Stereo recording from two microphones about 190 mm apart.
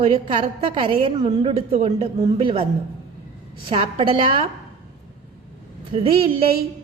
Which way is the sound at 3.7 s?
25° right (ahead or behind).